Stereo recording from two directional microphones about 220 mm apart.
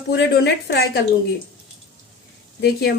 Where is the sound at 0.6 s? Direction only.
45° left (ahead or behind).